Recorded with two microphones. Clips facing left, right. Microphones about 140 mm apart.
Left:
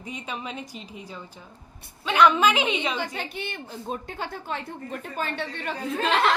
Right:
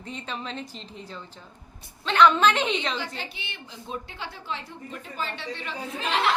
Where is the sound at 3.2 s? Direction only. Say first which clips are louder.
Left 6 dB; 50° left (ahead or behind).